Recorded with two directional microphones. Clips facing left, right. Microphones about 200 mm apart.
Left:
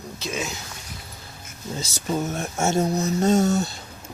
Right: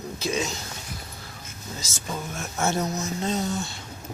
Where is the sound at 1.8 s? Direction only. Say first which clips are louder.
Left 8 dB; 35° left (ahead or behind).